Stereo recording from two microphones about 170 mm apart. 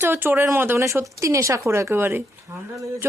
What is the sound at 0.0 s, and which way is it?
A woman's voice, 10° right (ahead or behind).